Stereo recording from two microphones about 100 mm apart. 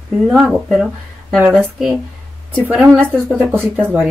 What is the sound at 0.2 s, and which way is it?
Speech, 5° right (ahead or behind).